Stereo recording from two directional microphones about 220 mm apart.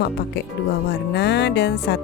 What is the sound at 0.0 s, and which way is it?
Speech, 50° left (ahead or behind).